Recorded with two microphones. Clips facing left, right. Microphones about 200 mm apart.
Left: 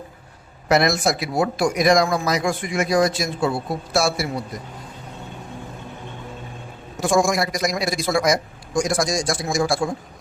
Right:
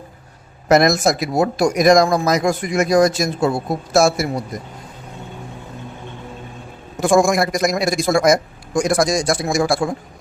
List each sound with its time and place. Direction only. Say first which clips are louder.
0.7 s speech: right 4 dB; 45° right (ahead or behind)
7.0 s a man's voice: right 4 dB; 55° right (ahead or behind)